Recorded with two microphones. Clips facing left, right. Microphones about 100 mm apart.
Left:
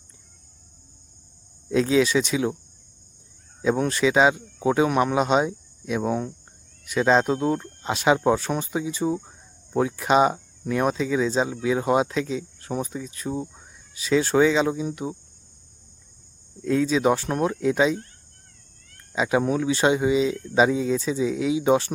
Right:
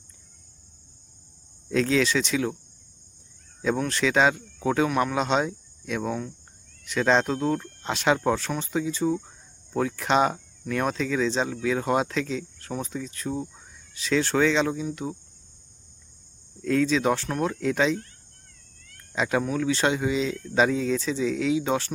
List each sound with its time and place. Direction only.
1.7 s speech: 10° left (ahead or behind)
3.8 s speech: 10° left (ahead or behind)
4.9 s speech: 25° left (ahead or behind)
5.1 s speech: 10° left (ahead or behind)
7.3 s speech: 20° left (ahead or behind)
7.8 s speech: 10° left (ahead or behind)
16.6 s speech: 10° left (ahead or behind)
19.1 s speech: 5° left (ahead or behind)
19.4 s speech: 20° left (ahead or behind)
20.3 s speech: 20° left (ahead or behind)